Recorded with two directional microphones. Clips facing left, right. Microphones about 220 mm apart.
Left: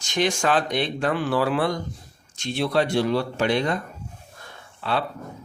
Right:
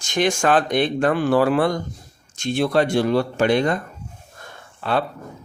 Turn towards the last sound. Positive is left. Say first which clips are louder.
# right 4 dB
turn(degrees=-50)  # may be behind; listen again after turning